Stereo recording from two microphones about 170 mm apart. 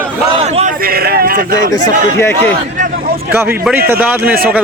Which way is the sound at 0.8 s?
65° right (ahead or behind).